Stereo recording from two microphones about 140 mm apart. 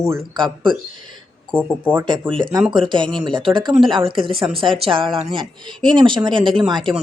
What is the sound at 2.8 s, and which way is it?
Speech, 35° right (ahead or behind).